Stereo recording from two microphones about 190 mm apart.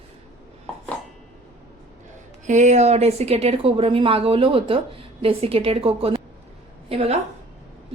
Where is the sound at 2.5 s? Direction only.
40° right (ahead or behind).